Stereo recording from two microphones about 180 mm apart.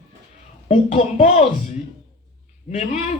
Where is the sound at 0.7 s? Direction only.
40° left (ahead or behind).